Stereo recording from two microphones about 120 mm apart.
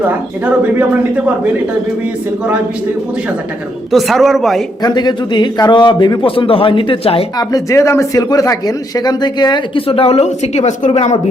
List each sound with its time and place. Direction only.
0.4 s speech: 10° right (ahead or behind)
3.9 s a man's voice: centre (ahead or behind)
4.8 s a man's voice: 35° left (ahead or behind); by 7.3 s 55° left (ahead or behind)
7.3 s speech: 30° left (ahead or behind); by 11.2 s 70° left (ahead or behind)